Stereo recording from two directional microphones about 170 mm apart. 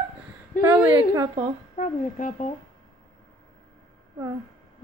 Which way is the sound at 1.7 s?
45° left (ahead or behind).